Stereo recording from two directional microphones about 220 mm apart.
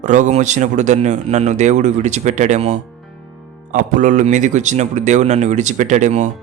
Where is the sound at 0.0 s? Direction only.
35° right (ahead or behind).